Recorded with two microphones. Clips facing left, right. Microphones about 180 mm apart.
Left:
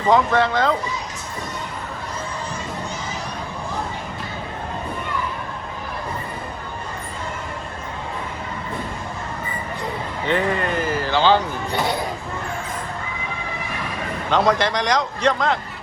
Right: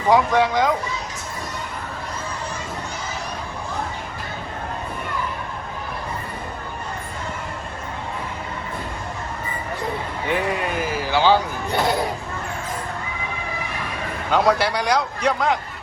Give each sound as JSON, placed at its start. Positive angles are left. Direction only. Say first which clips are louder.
{"t": 0.1, "sound": "a man's voice", "louder": "even", "side_deg": -15}
{"t": 10.2, "sound": "speech", "louder": "left 2 dB", "side_deg": -5}
{"t": 14.3, "sound": "a man's voice", "louder": "even", "side_deg": -10}